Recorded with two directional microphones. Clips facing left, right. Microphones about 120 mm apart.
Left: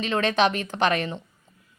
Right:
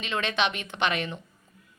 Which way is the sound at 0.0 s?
40° left (ahead or behind).